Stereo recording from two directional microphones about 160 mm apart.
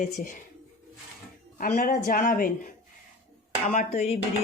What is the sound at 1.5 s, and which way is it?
Speech, 65° left (ahead or behind).